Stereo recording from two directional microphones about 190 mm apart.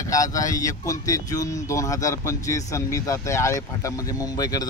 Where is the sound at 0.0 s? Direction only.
15° left (ahead or behind).